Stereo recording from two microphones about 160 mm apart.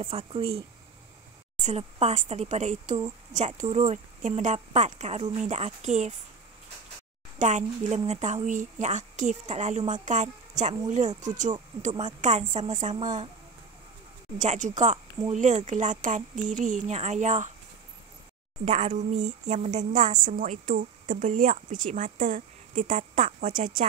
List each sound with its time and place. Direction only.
0.0 s speech: 35° right (ahead or behind)
7.3 s speech: 50° right (ahead or behind)
14.4 s speech: 50° right (ahead or behind)
18.7 s a woman's voice: 45° right (ahead or behind)